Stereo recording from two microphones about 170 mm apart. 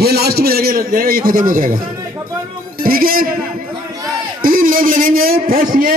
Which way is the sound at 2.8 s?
60° right (ahead or behind).